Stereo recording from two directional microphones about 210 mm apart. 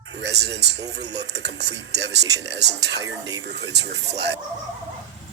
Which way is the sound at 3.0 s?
15° right (ahead or behind).